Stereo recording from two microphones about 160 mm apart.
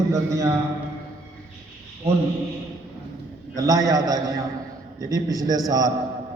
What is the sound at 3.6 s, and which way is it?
A man's voice, 20° right (ahead or behind).